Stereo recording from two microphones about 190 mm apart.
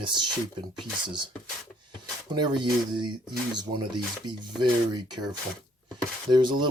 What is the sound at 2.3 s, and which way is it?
Speech, 25° right (ahead or behind).